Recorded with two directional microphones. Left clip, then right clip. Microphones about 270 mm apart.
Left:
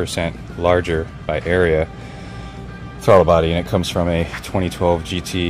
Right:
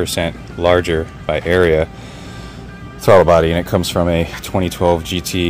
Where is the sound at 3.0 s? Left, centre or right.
Centre.